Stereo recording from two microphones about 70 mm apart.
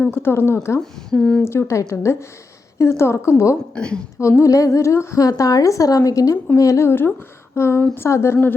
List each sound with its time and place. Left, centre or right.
0.2 s speech: left
1.1 s speech: centre
1.5 s speech: left
1.8 s a woman's voice: left
2.7 s a woman's voice: left
3.8 s speech: centre
4.2 s a woman's voice: left